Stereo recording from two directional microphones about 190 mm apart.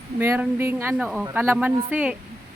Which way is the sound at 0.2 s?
15° right (ahead or behind).